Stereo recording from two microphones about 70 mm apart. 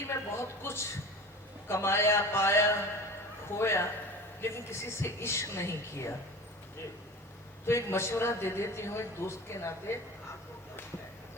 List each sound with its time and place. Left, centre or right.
0.0 s a man's voice: left
7.7 s a man's voice: left